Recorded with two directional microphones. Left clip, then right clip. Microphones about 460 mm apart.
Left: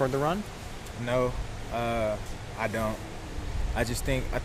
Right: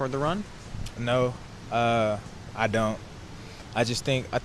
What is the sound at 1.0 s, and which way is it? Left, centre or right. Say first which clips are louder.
Speech: right 2 dB; right.